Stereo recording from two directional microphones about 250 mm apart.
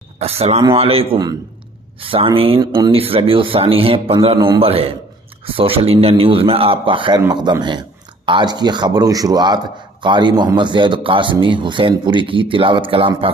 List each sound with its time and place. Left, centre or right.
0.2 s a man's voice: right